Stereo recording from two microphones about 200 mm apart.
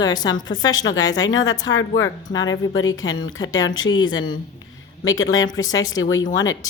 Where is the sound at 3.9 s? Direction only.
20° left (ahead or behind).